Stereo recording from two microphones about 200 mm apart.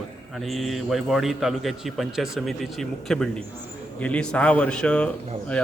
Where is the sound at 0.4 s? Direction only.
Centre (ahead or behind).